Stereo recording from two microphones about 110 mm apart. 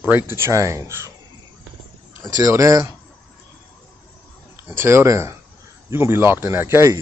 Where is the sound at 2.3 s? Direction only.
30° right (ahead or behind).